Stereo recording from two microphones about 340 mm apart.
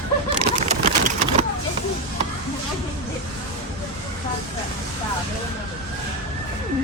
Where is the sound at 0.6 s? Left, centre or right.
Centre.